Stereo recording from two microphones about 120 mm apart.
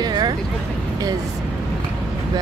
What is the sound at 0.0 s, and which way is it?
Vehicle, 35° right (ahead or behind).